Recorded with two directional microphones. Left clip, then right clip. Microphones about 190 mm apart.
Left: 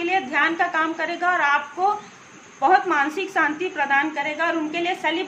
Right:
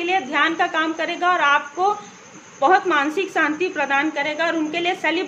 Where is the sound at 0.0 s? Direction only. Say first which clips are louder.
Right 1 dB; 25° right (ahead or behind).